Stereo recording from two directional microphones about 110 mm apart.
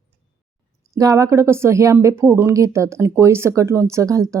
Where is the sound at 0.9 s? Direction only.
30° right (ahead or behind).